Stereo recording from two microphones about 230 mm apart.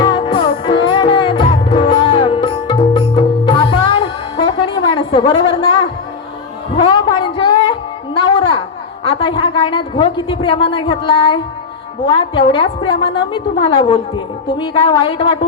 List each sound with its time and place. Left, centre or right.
0.0 s music: centre
6.7 s a sound: left
12.0 s a woman's voice: left